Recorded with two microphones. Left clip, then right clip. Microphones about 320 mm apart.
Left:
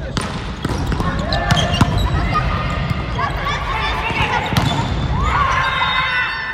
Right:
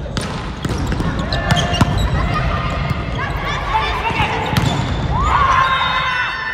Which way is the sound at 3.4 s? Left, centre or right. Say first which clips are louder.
Right 2 dB; centre.